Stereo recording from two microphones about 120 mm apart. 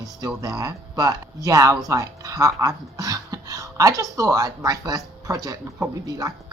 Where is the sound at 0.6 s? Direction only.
30° right (ahead or behind).